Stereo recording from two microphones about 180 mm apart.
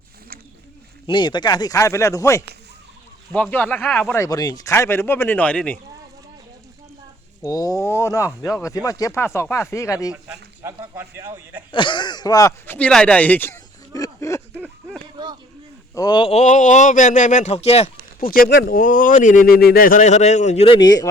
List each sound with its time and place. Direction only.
1.0 s speech: 25° left (ahead or behind); by 5.8 s 5° left (ahead or behind)
7.4 s speech: 20° left (ahead or behind)
10.6 s speech: 15° right (ahead or behind)
11.7 s speech: 25° left (ahead or behind)
16.0 s speech: 25° left (ahead or behind)
18.2 s speech: 55° left (ahead or behind); by 21.1 s 20° left (ahead or behind)